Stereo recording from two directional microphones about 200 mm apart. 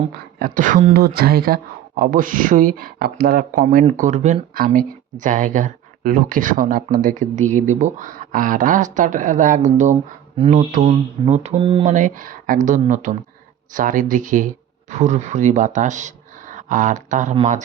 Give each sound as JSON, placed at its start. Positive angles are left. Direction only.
{"t": 0.3, "sound": "speech", "side_deg": -45}
{"t": 11.9, "sound": "speech", "side_deg": -40}